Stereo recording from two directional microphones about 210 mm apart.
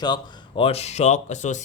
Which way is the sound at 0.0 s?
20° left (ahead or behind).